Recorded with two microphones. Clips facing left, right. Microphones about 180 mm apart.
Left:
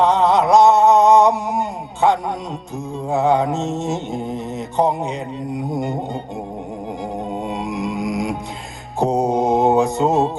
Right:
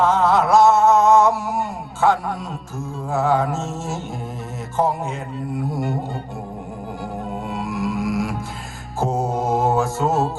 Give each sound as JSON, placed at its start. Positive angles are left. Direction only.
{"t": 0.0, "sound": "a sound", "side_deg": 20}
{"t": 3.1, "sound": "mantra", "side_deg": 20}
{"t": 5.7, "sound": "mantra", "side_deg": 20}
{"t": 7.4, "sound": "music", "side_deg": 20}
{"t": 9.0, "sound": "mantra", "side_deg": 20}